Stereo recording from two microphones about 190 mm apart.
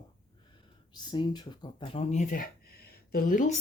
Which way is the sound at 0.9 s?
25° left (ahead or behind).